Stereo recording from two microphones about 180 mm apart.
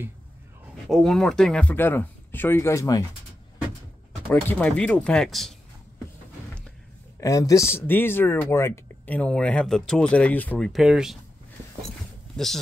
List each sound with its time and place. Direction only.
0.8 s speech: centre (ahead or behind)
4.3 s speech: 10° left (ahead or behind)
7.2 s speech: 20° left (ahead or behind); by 11.1 s 5° right (ahead or behind)
12.4 s speech: 5° left (ahead or behind)